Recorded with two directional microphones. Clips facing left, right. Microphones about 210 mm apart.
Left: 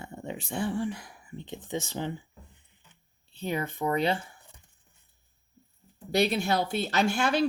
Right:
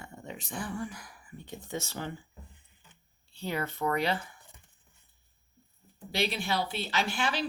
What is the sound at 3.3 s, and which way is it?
Speech, 20° left (ahead or behind).